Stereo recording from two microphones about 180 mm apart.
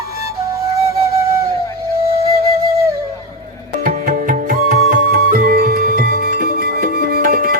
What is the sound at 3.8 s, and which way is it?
Music, 45° right (ahead or behind).